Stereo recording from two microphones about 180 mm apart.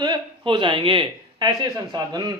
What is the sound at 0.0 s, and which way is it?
A woman's voice, 25° right (ahead or behind).